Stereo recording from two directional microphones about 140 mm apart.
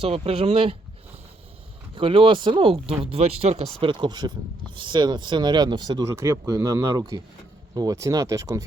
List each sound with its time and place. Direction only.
0.0 s speech: 45° right (ahead or behind)
2.0 s speech: 40° right (ahead or behind); by 8.6 s 20° right (ahead or behind)